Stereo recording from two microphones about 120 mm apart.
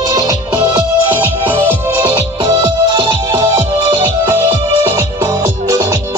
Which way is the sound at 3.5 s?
25° right (ahead or behind).